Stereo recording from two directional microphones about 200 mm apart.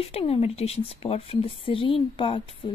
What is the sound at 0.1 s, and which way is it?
Speech, 30° left (ahead or behind).